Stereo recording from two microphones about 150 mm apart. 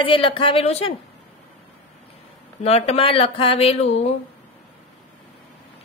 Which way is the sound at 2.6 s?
45° left (ahead or behind).